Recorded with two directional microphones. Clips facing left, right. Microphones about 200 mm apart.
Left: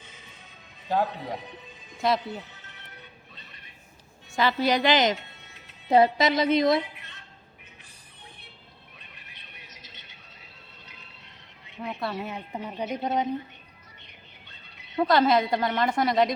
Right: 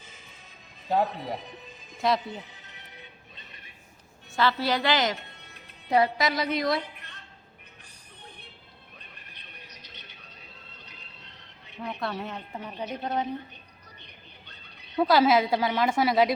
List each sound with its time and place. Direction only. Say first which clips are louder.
0.9 s a woman's voice: even; centre (ahead or behind)
4.4 s a woman's voice: left 2 dB; 15° left (ahead or behind)
11.8 s a woman's voice: left 1 dB; 5° left (ahead or behind)
12.3 s a woman's voice: left 3 dB; 15° left (ahead or behind)
15.0 s a woman's voice: even; 5° right (ahead or behind)